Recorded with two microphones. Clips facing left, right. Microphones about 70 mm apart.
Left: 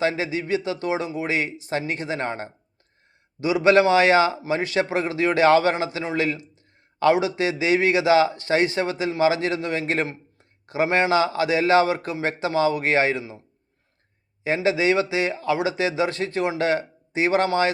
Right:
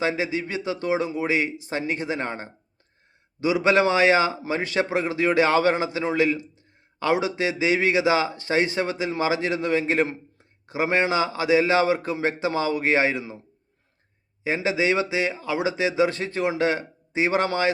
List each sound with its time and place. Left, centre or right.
0.0 s a man's voice: centre
14.4 s a man's voice: centre